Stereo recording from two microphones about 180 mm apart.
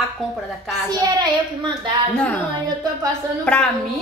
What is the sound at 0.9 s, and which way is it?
Speech, 25° right (ahead or behind).